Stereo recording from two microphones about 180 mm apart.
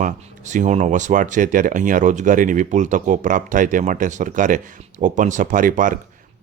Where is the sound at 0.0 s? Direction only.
45° right (ahead or behind).